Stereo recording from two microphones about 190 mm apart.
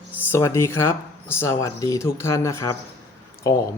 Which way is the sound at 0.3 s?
15° left (ahead or behind).